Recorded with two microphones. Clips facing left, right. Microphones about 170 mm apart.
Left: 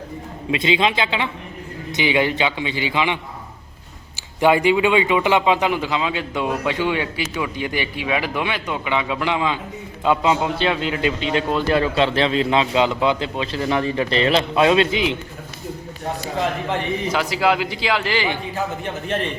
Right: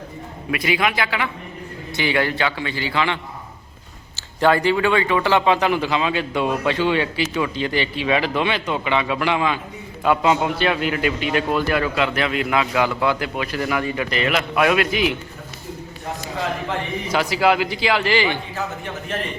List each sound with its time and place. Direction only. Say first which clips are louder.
0.5 s a man's voice: left 2 dB; 25° left (ahead or behind)
4.4 s a man's voice: left 1 dB; 15° left (ahead or behind)
6.3 s speech: right 1 dB; 20° right (ahead or behind)
6.7 s a man's voice: right 2 dB; 15° left (ahead or behind)
17.1 s a man's voice: right 2 dB; 10° right (ahead or behind)
18.2 s a man's voice: right 1 dB; 15° left (ahead or behind)